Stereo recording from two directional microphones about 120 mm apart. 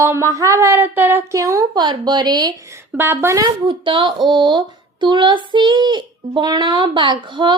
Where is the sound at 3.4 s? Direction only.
45° right (ahead or behind).